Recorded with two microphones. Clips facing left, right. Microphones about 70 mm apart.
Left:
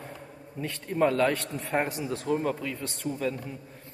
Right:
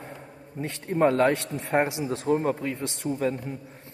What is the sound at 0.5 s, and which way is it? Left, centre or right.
A man's voice, right.